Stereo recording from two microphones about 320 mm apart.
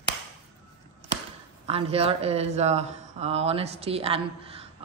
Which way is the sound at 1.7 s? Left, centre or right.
Centre.